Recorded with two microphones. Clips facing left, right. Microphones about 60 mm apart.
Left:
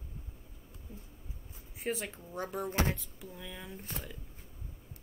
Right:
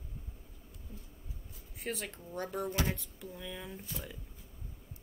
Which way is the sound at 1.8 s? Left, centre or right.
Centre.